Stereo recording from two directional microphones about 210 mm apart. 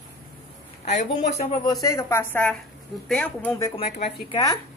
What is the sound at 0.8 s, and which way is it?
Speech, 35° left (ahead or behind).